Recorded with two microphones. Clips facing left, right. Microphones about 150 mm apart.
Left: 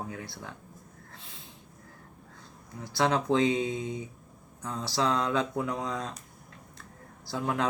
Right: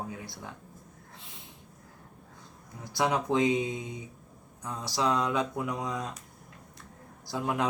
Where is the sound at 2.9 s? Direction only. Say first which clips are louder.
Left 1 dB; 15° right (ahead or behind).